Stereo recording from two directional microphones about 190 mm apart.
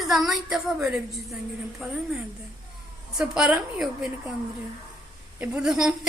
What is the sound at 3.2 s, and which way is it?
Speech, 5° right (ahead or behind).